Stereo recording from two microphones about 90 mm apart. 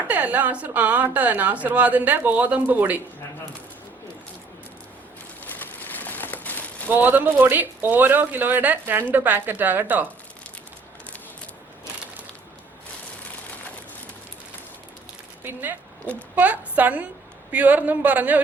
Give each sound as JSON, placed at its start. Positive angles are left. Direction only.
{"t": 0.1, "sound": "speech", "side_deg": -15}
{"t": 5.5, "sound": "a sound", "side_deg": 20}
{"t": 6.8, "sound": "speech", "side_deg": -20}
{"t": 16.3, "sound": "speech", "side_deg": -20}